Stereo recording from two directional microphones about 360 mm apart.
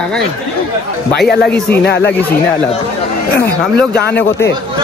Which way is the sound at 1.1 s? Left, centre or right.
Left.